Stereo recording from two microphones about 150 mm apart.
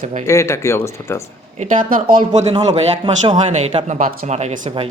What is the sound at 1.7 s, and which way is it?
Speech, 65° right (ahead or behind).